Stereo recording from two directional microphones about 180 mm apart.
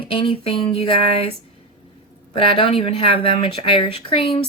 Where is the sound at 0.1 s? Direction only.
30° left (ahead or behind).